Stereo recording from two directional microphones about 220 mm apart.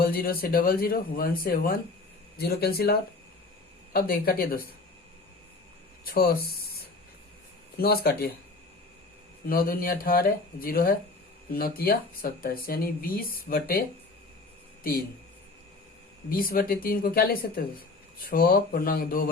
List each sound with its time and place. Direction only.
0.0 s speech: 40° left (ahead or behind)
6.1 s speech: 45° left (ahead or behind)
7.8 s speech: 45° left (ahead or behind)
9.5 s speech: 40° left (ahead or behind)
16.3 s speech: 40° left (ahead or behind)